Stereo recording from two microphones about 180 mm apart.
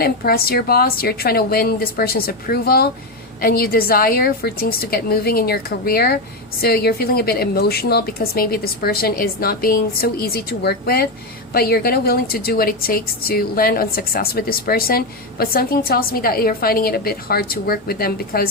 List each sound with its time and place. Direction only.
0.0 s a woman's voice: 55° left (ahead or behind)